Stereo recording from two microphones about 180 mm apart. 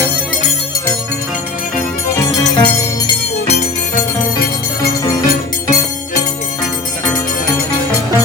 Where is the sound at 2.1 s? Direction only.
20° left (ahead or behind).